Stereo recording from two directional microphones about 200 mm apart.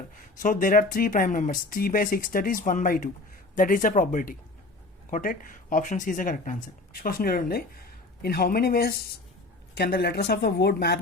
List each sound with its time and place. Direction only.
0.4 s speech: 45° left (ahead or behind)